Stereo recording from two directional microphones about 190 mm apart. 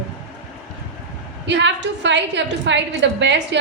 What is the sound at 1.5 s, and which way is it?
A woman's voice, 70° right (ahead or behind).